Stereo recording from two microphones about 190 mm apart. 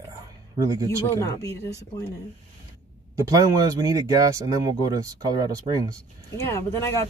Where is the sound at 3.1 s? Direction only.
20° right (ahead or behind).